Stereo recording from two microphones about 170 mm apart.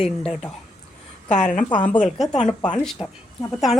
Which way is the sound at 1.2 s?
45° left (ahead or behind).